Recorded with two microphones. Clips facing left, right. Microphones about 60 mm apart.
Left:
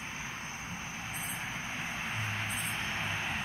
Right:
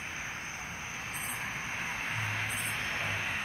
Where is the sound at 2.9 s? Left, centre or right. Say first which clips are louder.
Right 1 dB; right.